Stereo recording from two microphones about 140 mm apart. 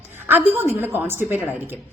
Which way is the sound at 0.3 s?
15° right (ahead or behind).